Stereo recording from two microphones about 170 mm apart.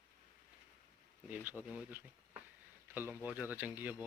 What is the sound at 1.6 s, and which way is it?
Speech, 5° right (ahead or behind).